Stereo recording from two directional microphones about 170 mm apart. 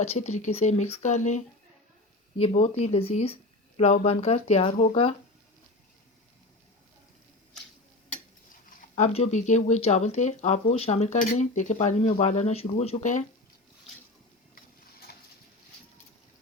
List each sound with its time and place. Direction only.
0.0 s speech: 40° left (ahead or behind)
9.0 s speech: 40° left (ahead or behind)